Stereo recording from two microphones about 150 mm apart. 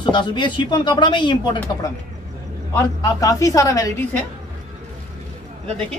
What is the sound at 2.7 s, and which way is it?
Speech, 20° left (ahead or behind).